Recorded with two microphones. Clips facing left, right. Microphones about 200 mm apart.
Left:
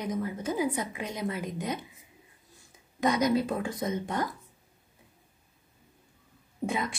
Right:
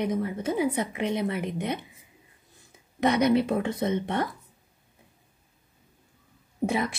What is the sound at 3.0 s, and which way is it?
A woman's voice, 65° right (ahead or behind).